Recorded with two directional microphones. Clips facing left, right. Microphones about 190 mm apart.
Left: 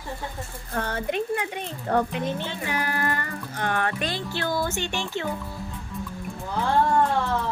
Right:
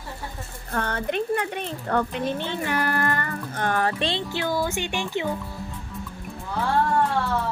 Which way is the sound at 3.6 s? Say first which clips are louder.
Right 2 dB; 40° right (ahead or behind).